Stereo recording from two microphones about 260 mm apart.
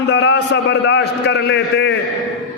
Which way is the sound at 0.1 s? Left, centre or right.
Left.